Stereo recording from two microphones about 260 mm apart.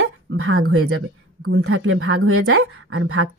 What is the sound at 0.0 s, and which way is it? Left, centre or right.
Speech, right.